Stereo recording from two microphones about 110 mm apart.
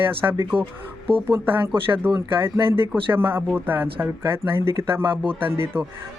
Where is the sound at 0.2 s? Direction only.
20° right (ahead or behind).